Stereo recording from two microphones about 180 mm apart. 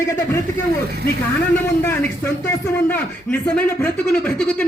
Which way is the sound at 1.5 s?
10° left (ahead or behind).